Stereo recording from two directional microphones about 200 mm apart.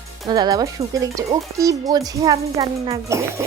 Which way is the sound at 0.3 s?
20° right (ahead or behind).